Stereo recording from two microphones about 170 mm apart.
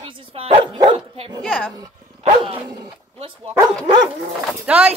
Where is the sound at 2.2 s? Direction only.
30° right (ahead or behind).